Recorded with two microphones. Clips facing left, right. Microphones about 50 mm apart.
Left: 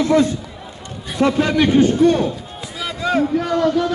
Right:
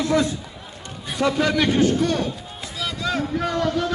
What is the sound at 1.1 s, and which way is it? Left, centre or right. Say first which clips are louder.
A man's voice: left 4 dB; left.